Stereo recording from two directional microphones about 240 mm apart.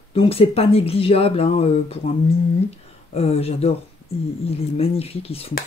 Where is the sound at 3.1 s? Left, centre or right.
Left.